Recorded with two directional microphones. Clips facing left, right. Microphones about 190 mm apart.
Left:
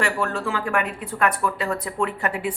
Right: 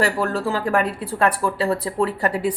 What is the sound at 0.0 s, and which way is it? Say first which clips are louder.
Speech: right 3 dB; 35° right (ahead or behind).